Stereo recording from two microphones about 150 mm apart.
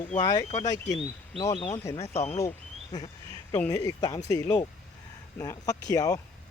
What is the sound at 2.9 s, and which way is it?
Speech, 25° left (ahead or behind).